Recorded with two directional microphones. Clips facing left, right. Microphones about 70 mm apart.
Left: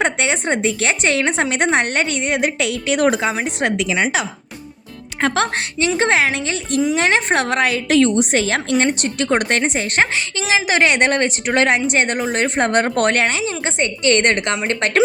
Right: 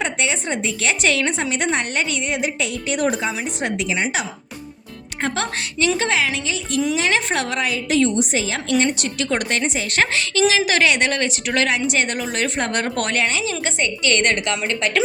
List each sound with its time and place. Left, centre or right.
0.0 s a woman's voice: left
3.6 s speech: left
5.2 s a woman's voice: left
6.0 s a woman's voice: left
8.8 s speech: left
10.0 s a woman's voice: left